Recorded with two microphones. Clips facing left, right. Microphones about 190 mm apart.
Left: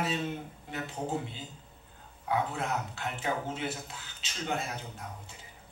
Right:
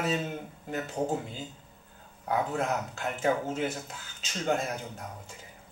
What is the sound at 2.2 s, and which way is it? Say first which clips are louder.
Speech: right 3 dB; 45° right (ahead or behind).